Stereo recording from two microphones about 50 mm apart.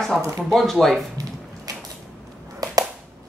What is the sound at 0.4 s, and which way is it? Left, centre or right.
Speech, centre.